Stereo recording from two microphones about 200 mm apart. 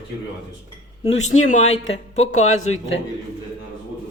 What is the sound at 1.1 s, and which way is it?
Speech, 35° left (ahead or behind).